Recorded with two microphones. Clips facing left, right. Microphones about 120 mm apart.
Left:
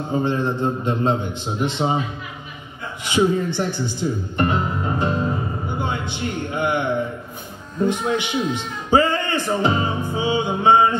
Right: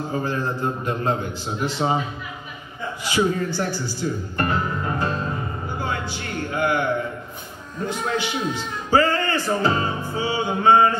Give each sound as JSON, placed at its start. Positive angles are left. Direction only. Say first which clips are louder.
{"t": 0.1, "sound": "a man's voice", "louder": "left 6 dB", "side_deg": 25}
{"t": 3.0, "sound": "a man's voice", "louder": "left 3 dB", "side_deg": 20}